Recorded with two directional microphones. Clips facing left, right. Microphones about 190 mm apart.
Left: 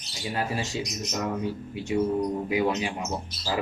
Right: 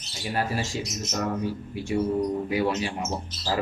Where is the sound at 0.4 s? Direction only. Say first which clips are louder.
Right 1 dB; 20° left (ahead or behind).